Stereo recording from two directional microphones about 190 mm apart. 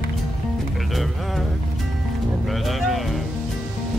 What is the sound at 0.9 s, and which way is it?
Music, centre (ahead or behind).